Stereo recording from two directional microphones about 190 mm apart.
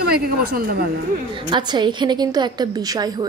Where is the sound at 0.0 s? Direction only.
55° right (ahead or behind).